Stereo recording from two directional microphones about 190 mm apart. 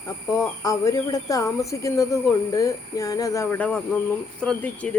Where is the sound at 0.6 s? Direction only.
15° left (ahead or behind).